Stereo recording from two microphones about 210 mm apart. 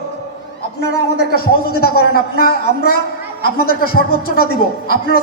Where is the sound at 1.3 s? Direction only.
45° left (ahead or behind).